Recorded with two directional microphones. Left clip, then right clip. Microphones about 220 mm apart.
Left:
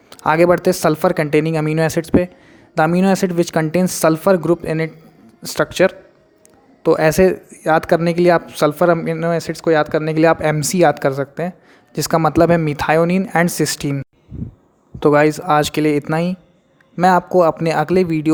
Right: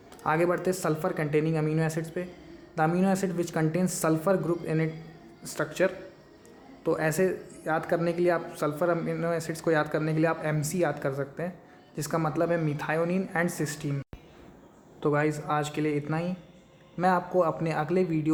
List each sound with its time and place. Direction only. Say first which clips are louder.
0.1 s speech: left 13 dB; 40° left (ahead or behind)